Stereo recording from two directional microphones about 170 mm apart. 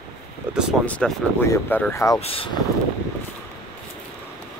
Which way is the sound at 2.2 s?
35° left (ahead or behind).